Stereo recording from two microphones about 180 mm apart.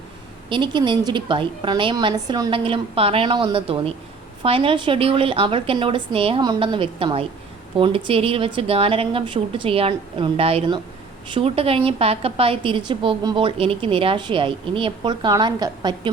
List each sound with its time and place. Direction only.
0.5 s a woman's voice: 25° right (ahead or behind)